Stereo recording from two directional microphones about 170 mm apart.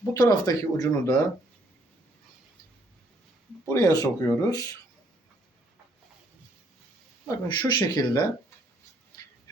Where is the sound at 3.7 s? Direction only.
20° left (ahead or behind).